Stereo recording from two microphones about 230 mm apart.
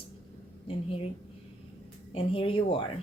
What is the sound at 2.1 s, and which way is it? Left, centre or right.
Speech, left.